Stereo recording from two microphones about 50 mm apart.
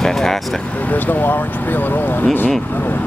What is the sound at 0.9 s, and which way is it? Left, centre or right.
Speech, left.